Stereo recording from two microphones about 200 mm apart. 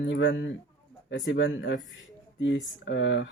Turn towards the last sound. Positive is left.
turn(degrees=65)  # may be behind; listen again after turning